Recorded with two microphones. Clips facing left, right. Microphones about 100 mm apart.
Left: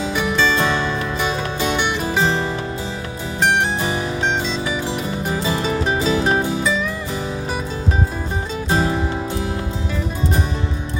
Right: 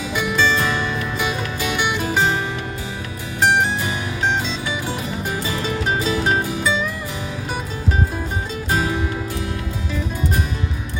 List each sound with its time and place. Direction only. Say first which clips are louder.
0.5 s music: left 2 dB; 30° left (ahead or behind)
5.5 s music: left 3 dB; 30° left (ahead or behind)
8.7 s music: left 2 dB; 30° left (ahead or behind)